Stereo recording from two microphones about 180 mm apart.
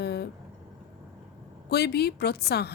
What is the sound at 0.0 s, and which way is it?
Vehicle, 65° left (ahead or behind).